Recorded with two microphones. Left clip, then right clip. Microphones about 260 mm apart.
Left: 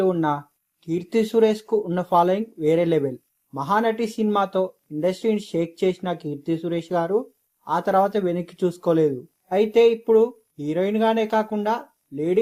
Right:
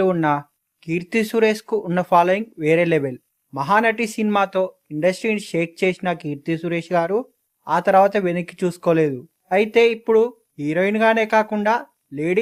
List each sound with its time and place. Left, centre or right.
0.0 s speech: right